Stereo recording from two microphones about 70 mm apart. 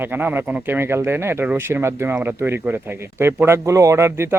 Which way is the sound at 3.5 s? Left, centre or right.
Right.